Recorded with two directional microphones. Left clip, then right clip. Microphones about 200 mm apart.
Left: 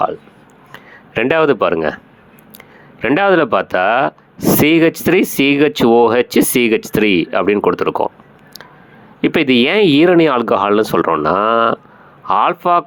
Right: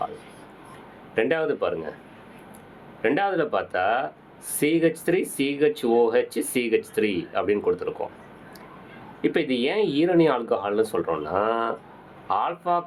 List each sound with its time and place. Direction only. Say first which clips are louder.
1.1 s speech: left 10 dB; 40° left (ahead or behind)
3.0 s speech: left 11 dB; 40° left (ahead or behind)
9.2 s speech: left 11 dB; 40° left (ahead or behind)